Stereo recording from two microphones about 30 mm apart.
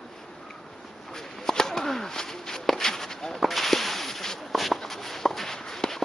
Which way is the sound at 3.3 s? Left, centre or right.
Centre.